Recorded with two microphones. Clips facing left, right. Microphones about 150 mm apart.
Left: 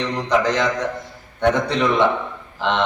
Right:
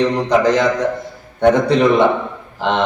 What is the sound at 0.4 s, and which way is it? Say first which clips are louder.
Speech: right 6 dB; 5° right (ahead or behind).